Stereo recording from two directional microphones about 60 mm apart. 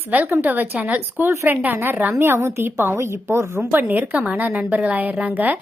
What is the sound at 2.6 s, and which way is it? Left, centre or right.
Speech, right.